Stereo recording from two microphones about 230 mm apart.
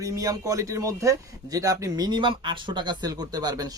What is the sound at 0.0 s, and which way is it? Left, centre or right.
Speech, centre.